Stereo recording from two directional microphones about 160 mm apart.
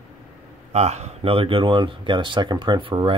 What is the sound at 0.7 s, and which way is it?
Speech, 45° right (ahead or behind).